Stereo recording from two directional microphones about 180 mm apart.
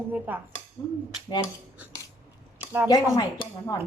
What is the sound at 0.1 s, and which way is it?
Speech, 10° right (ahead or behind).